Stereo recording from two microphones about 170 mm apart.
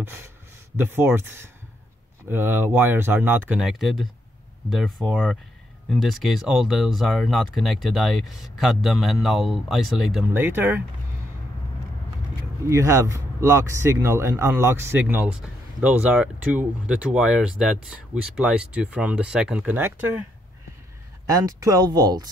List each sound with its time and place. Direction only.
0.0 s speech: 15° right (ahead or behind)
10.3 s speech: 10° right (ahead or behind)
12.6 s speech: 15° right (ahead or behind)
21.3 s speech: 20° right (ahead or behind)